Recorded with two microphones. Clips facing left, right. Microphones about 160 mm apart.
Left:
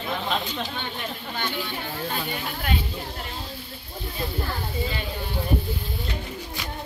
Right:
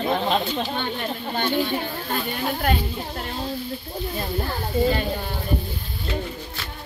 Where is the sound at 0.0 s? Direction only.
45° right (ahead or behind).